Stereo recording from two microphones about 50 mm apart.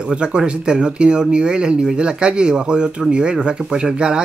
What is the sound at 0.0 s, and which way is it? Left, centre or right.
Speech, centre.